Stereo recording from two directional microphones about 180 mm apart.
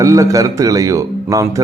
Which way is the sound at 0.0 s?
15° right (ahead or behind).